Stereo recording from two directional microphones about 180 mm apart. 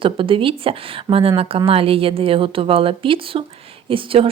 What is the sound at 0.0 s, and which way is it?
Speech, 30° right (ahead or behind).